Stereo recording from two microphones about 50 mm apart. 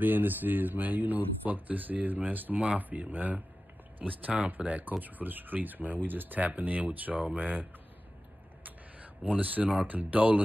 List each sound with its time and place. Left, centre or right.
0.0 s speech: right
8.6 s speech: right